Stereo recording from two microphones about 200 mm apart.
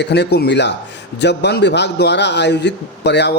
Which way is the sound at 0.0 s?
60° left (ahead or behind).